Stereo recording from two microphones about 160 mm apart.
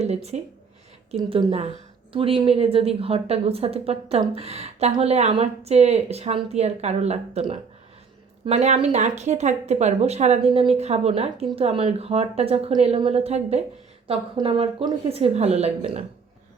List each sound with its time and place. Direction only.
0.0 s a woman's voice: 40° right (ahead or behind)
1.3 s a woman's voice: 30° right (ahead or behind)